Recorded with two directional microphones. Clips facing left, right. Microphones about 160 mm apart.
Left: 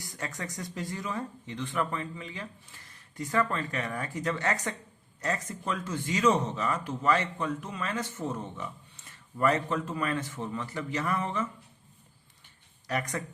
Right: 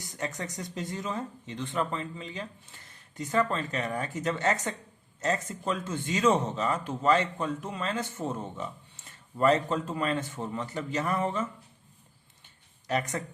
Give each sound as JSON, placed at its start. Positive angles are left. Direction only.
{"t": 0.0, "sound": "speech", "side_deg": -20}
{"t": 12.9, "sound": "speech", "side_deg": -25}